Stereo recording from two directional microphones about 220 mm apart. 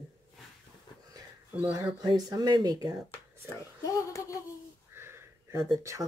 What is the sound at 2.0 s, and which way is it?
Speech, 20° right (ahead or behind).